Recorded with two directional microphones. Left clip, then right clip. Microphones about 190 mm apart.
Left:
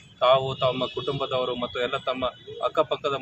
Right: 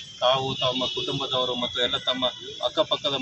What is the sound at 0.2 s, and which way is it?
Speech, 15° left (ahead or behind).